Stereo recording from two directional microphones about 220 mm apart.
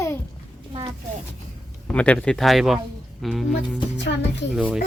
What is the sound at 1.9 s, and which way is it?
Speech, 5° left (ahead or behind).